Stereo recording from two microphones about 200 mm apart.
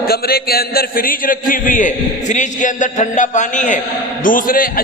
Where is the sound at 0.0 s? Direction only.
50° left (ahead or behind).